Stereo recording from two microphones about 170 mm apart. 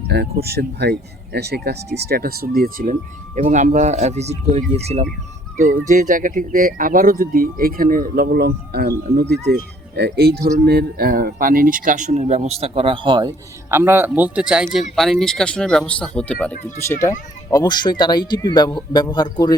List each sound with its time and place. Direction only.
0.4 s speech: 70° right (ahead or behind); by 19.5 s 25° left (ahead or behind)